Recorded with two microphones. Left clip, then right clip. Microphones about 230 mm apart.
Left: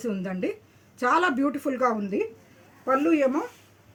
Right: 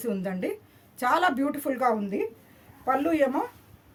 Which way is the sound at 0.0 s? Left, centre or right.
Right.